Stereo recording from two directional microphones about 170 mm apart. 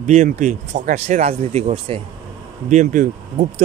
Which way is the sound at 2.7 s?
50° right (ahead or behind).